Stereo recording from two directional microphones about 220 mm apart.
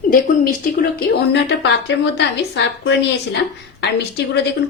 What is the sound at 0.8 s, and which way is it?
A woman's voice, 50° left (ahead or behind).